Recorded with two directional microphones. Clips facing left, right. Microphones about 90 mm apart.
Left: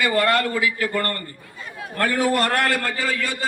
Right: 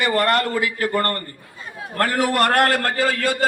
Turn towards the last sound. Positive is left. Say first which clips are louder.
# right 4 dB
turn(degrees=-70)  # may be behind; listen again after turning